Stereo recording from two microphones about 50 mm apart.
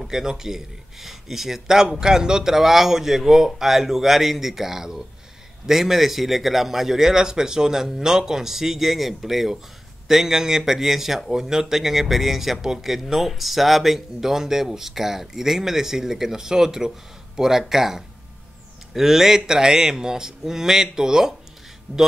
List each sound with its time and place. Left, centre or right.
0.0 s speech: centre
21.9 s speech: right